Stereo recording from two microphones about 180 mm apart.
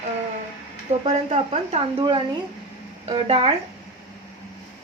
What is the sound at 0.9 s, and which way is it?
Speech, 30° right (ahead or behind).